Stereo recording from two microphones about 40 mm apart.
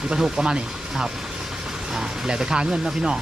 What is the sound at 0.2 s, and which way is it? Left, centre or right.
Speech, centre.